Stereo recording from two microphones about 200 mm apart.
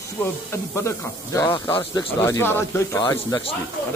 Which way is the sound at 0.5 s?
15° left (ahead or behind).